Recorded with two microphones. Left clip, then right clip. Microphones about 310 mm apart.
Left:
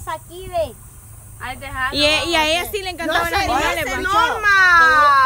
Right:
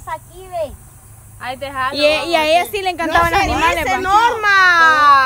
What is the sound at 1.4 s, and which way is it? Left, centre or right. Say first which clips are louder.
Speech: right 3 dB; right.